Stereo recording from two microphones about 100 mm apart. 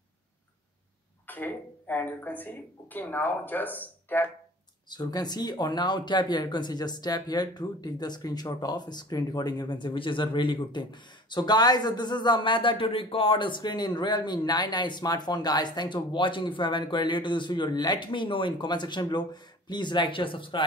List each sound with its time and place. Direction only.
1.2 s speech: 20° left (ahead or behind)
4.8 s speech: 45° left (ahead or behind)